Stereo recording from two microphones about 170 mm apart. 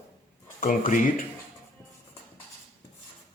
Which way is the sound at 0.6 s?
50° left (ahead or behind).